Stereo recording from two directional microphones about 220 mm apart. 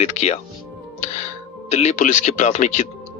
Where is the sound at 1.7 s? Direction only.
30° left (ahead or behind).